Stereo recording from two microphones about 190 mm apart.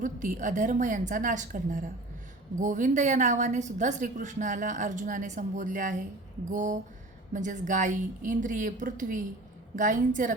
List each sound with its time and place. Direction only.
0.0 s a woman's voice: 45° right (ahead or behind)